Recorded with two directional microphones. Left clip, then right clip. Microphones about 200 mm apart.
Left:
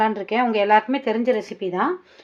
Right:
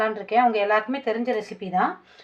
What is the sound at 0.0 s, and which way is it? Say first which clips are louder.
Speech: even; 45° left (ahead or behind).